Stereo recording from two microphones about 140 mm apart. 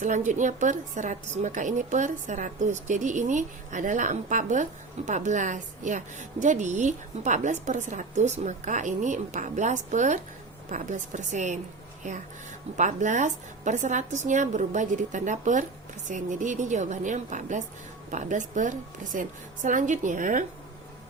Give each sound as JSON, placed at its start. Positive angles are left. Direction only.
{"t": 0.3, "sound": "a woman's voice", "side_deg": -60}
{"t": 12.7, "sound": "a woman's voice", "side_deg": -60}